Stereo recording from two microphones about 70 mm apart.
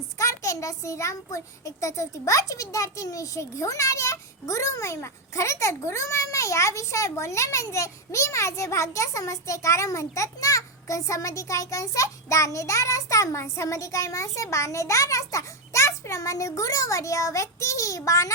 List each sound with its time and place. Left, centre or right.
0.2 s a child's voice: left